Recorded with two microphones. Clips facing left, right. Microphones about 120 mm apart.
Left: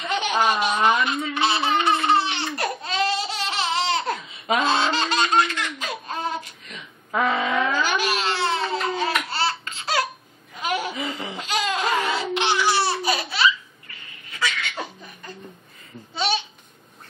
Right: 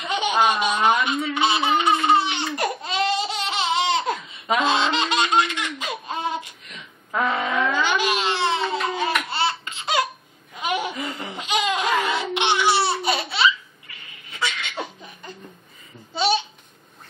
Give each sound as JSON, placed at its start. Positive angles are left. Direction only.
{"t": 0.0, "sound": "baby laughter", "side_deg": -5}
{"t": 10.5, "sound": "laughter", "side_deg": 0}
{"t": 13.0, "sound": "laughter", "side_deg": -25}